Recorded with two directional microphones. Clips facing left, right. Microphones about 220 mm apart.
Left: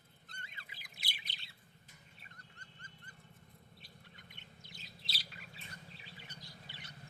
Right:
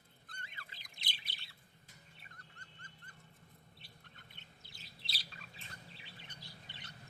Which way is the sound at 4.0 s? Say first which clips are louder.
Left 2 dB; 15° left (ahead or behind).